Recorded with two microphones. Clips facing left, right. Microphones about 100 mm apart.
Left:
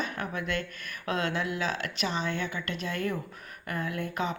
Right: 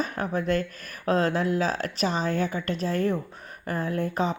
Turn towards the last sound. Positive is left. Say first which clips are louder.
# right 5 dB
turn(degrees=-35)  # may be behind; listen again after turning